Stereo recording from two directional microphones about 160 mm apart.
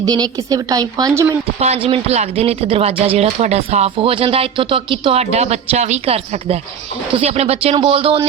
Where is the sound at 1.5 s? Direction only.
40° right (ahead or behind).